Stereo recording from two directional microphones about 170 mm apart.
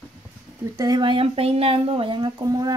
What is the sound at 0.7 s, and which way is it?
Speech, 25° right (ahead or behind).